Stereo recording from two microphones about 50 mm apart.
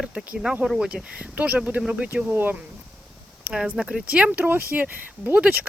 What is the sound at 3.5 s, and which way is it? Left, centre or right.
Speech, centre.